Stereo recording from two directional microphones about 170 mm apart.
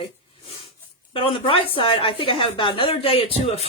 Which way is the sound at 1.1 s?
30° left (ahead or behind).